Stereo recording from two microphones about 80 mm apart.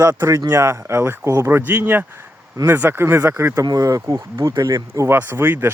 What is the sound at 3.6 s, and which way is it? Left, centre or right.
Speech, right.